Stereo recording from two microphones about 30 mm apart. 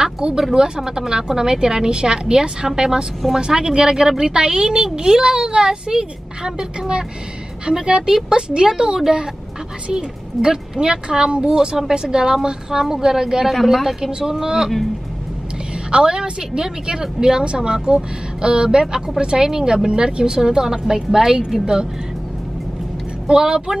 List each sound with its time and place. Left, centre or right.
0.0 s a sound: right
0.6 s a woman's voice: right
13.5 s speech: centre
14.0 s a woman's voice: centre
15.9 s a woman's voice: right
19.9 s a woman's voice: right
23.2 s a woman's voice: right